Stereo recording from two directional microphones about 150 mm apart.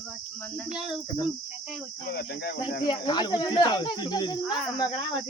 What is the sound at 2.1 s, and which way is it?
Speech, 90° left.